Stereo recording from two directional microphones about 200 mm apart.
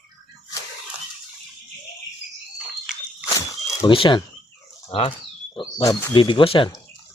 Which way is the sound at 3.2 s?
15° left (ahead or behind).